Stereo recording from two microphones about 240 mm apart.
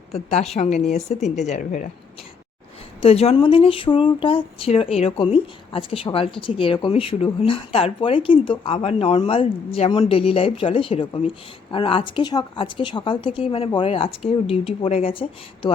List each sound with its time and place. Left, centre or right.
0.1 s speech: left
3.0 s speech: left